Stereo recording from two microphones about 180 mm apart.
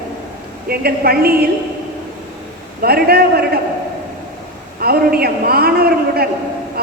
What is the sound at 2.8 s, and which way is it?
Speech, 60° right (ahead or behind).